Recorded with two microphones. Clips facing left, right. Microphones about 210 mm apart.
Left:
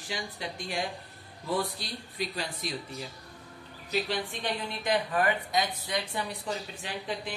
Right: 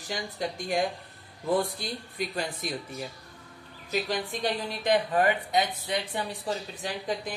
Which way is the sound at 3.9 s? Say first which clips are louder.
Right 1 dB; 45° right (ahead or behind).